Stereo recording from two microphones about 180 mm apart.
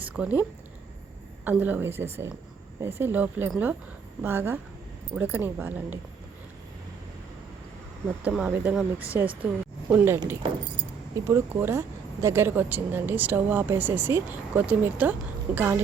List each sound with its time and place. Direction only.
0.0 s speech: 10° right (ahead or behind)
1.5 s speech: 10° right (ahead or behind)
8.0 s speech: 5° right (ahead or behind)
10.4 s keys jangling: 25° right (ahead or behind)
11.3 s speech: 15° right (ahead or behind)